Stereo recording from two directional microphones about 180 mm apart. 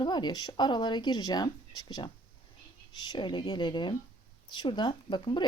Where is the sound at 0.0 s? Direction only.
25° left (ahead or behind).